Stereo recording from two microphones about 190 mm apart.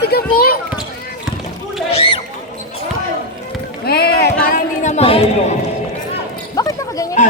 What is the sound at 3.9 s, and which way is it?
Speech, 55° left (ahead or behind).